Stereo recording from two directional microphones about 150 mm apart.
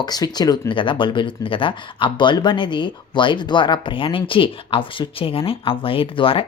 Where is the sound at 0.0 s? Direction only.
25° left (ahead or behind).